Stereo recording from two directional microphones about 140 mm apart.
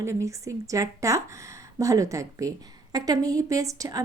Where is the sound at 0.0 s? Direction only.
20° right (ahead or behind).